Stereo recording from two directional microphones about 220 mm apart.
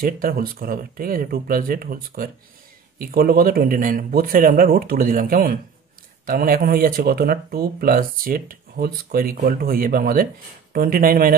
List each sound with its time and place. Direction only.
0.0 s speech: 40° right (ahead or behind)